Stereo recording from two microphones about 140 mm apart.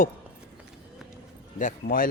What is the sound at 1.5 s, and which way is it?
Speech, 75° left (ahead or behind).